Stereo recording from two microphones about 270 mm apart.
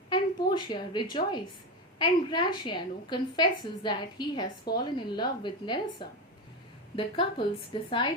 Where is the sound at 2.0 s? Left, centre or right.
Centre.